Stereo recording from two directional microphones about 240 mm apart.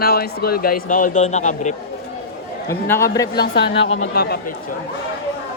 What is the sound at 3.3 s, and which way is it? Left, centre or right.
Speech, left.